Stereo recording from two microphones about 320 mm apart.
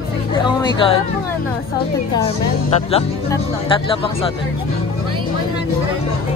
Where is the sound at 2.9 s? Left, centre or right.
Centre.